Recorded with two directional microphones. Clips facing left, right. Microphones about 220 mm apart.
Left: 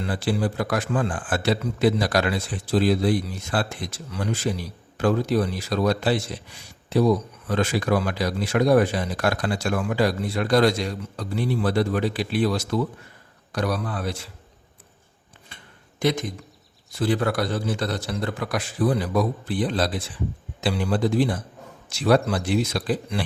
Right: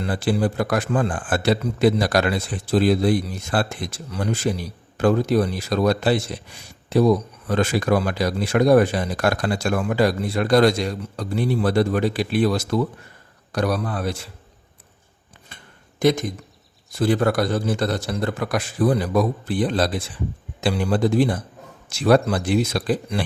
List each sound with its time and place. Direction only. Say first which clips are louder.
0.0 s speech: right 3 dB; 45° right (ahead or behind)
7.4 s speech: right 3 dB; 45° right (ahead or behind)
15.5 s a sound: right 2 dB; 45° right (ahead or behind)
16.0 s a man's voice: right 5 dB; 45° right (ahead or behind)